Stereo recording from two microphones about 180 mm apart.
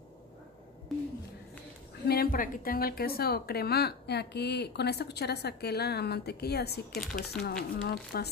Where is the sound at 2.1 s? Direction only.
55° left (ahead or behind).